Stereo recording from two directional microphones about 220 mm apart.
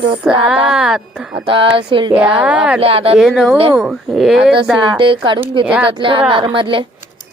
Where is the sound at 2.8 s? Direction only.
25° right (ahead or behind).